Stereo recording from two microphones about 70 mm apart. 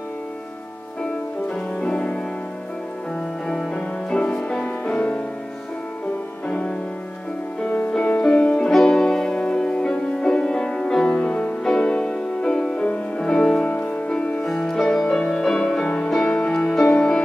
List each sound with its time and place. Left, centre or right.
1.5 s music: centre
3.4 s music: centre
6.4 s music: centre
7.9 s music: centre